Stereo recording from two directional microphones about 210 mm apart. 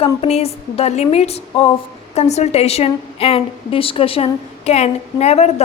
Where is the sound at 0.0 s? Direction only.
30° left (ahead or behind).